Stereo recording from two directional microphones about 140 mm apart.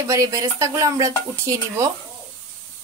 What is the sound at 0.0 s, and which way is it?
Speech, 25° right (ahead or behind).